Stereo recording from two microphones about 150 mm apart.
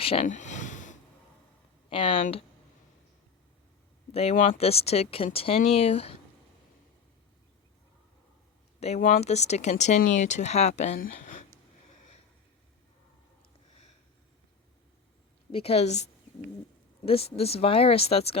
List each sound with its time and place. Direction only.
0.0 s speech: 40° left (ahead or behind); by 0.9 s 55° left (ahead or behind)
1.9 s speech: 35° left (ahead or behind)
4.1 s speech: 40° left (ahead or behind)
9.0 s speech: 65° left (ahead or behind)
9.2 s speech: 45° left (ahead or behind)
15.5 s speech: 40° left (ahead or behind)
17.1 s speech: 40° left (ahead or behind)